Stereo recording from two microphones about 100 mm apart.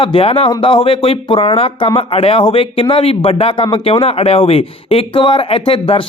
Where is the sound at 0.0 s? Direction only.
65° left (ahead or behind).